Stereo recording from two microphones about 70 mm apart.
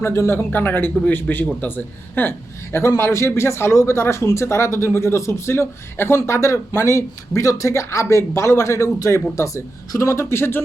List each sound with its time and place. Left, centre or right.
0.0 s speech: left
0.5 s speech: left
3.0 s speech: left